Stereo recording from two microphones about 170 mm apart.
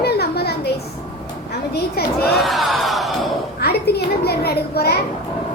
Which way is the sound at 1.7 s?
70° left (ahead or behind).